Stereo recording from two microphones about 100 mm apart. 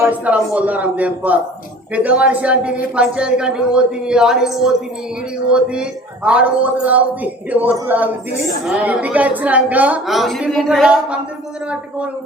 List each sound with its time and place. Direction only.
0.0 s a man's voice: 15° right (ahead or behind)
10.1 s speech: centre (ahead or behind)